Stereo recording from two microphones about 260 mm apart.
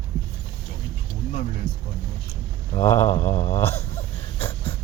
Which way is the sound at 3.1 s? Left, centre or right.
Left.